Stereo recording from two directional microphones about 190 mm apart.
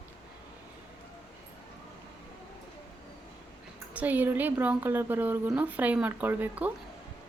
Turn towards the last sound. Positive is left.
turn(degrees=-10)  # may be behind; listen again after turning